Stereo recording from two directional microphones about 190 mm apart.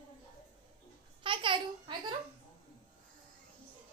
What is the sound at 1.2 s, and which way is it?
Babbling, 25° right (ahead or behind).